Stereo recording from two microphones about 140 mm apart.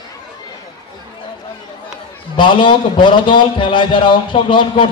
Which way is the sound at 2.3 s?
35° left (ahead or behind).